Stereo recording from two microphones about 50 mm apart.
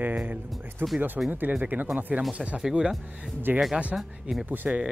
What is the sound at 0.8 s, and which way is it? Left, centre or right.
Speech, right.